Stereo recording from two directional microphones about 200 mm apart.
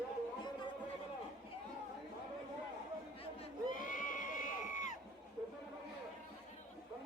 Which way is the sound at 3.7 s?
40° left (ahead or behind).